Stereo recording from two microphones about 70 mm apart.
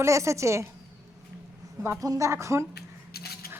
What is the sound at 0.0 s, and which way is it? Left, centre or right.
Speech, right.